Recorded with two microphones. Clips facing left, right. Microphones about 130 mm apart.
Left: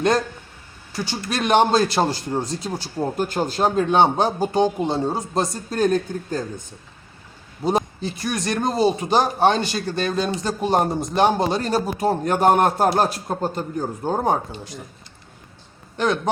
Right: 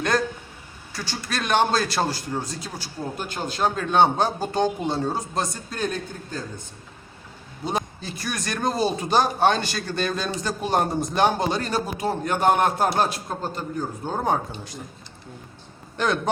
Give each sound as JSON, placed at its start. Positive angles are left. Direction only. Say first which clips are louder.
{"t": 0.9, "sound": "a man's voice", "louder": "left 4 dB", "side_deg": 15}
{"t": 3.2, "sound": "a man's voice", "louder": "left 4 dB", "side_deg": 40}
{"t": 3.8, "sound": "a man's voice", "louder": "left 2 dB", "side_deg": 15}
{"t": 7.6, "sound": "a man's voice", "louder": "left 7 dB", "side_deg": 40}
{"t": 8.0, "sound": "a man's voice", "louder": "left 6 dB", "side_deg": 25}
{"t": 16.0, "sound": "a man's voice", "louder": "left 2 dB", "side_deg": 5}